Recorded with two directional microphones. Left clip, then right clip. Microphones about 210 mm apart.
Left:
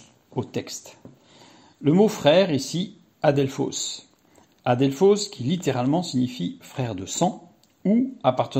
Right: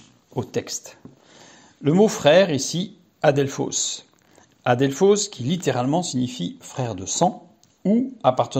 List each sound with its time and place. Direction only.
0.3 s speech: 20° right (ahead or behind)